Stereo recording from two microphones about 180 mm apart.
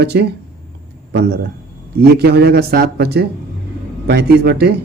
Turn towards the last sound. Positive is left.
turn(degrees=-60)  # may be behind; listen again after turning